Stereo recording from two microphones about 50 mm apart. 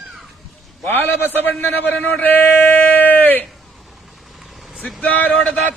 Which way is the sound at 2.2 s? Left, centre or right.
Left.